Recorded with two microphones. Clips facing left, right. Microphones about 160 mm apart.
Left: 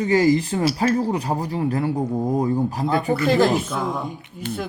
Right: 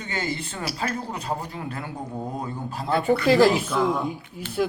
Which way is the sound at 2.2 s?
15° left (ahead or behind).